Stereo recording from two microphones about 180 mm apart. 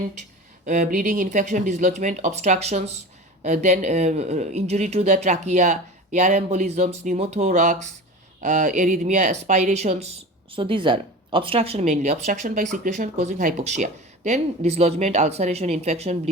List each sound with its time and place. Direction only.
0.6 s speech: 50° right (ahead or behind)